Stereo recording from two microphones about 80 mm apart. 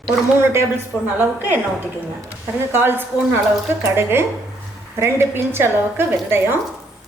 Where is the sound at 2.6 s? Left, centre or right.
Right.